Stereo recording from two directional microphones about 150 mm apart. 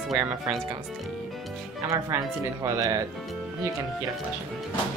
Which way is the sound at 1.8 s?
20° right (ahead or behind).